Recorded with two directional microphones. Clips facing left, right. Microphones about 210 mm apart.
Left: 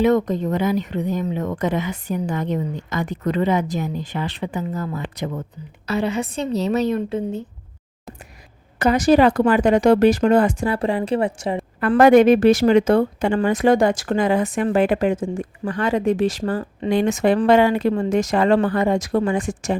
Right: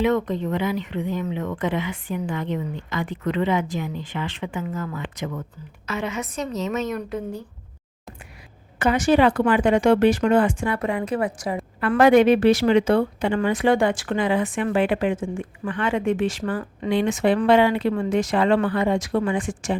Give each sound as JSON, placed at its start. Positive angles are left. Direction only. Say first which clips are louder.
{"t": 0.0, "sound": "speech", "louder": "left 4 dB", "side_deg": 40}
{"t": 8.8, "sound": "a woman's voice", "louder": "left 3 dB", "side_deg": 40}
{"t": 11.9, "sound": "speech", "louder": "left 3 dB", "side_deg": 45}